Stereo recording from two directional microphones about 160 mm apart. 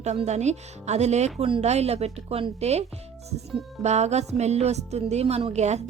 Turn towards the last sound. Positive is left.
turn(degrees=-45)  # may be behind; listen again after turning